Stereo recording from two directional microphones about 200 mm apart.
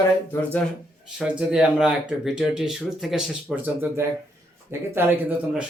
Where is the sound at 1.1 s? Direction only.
5° right (ahead or behind).